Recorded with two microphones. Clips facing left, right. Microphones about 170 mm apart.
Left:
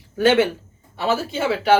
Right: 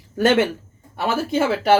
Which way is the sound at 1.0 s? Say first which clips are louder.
Right 1 dB; 50° right (ahead or behind).